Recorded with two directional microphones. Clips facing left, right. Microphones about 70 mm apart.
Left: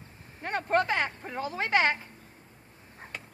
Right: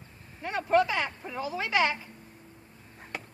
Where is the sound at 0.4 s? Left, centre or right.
Left.